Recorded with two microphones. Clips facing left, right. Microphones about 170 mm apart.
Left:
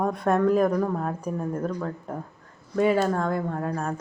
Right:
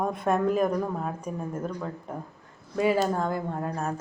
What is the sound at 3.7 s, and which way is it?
Speech, 5° right (ahead or behind).